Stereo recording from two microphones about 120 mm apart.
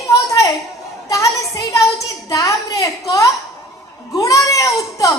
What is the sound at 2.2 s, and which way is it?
Speech, 30° left (ahead or behind).